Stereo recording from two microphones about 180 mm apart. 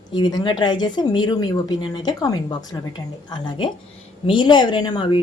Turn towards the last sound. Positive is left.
turn(degrees=25)  # may be behind; listen again after turning